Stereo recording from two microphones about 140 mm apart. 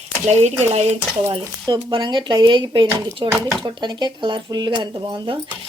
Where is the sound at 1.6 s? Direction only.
35° right (ahead or behind).